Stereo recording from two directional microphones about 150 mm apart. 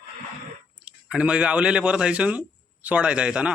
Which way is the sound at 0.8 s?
5° right (ahead or behind).